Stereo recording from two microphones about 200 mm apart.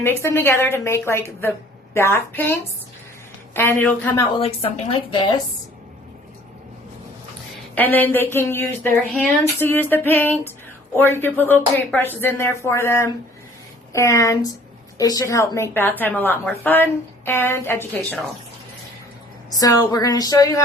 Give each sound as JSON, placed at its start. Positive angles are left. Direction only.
{"t": 0.0, "sound": "a woman's voice", "side_deg": 15}
{"t": 4.3, "sound": "a woman's voice", "side_deg": 30}
{"t": 7.8, "sound": "a woman's voice", "side_deg": 10}
{"t": 19.5, "sound": "a woman's voice", "side_deg": 20}